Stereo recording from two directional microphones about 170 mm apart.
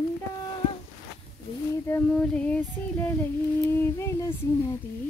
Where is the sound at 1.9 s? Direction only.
10° left (ahead or behind).